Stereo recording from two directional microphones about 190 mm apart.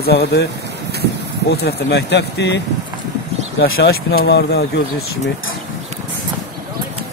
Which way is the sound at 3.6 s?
60° left (ahead or behind).